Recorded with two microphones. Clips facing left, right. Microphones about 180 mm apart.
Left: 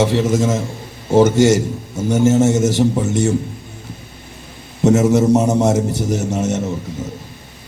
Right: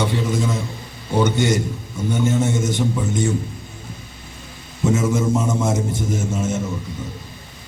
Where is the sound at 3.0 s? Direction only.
75° left (ahead or behind).